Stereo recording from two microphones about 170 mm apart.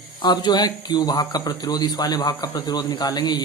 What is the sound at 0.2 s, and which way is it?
A man's voice, 25° left (ahead or behind).